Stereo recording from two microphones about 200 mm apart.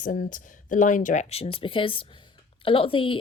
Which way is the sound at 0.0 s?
40° left (ahead or behind).